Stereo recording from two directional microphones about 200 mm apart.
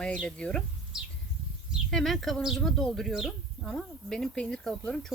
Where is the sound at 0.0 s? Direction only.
Centre (ahead or behind).